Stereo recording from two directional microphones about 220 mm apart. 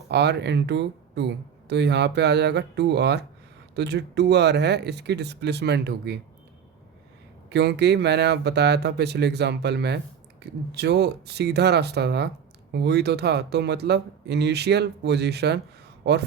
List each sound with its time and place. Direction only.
0.1 s speech: 50° right (ahead or behind)
7.5 s speech: 50° right (ahead or behind)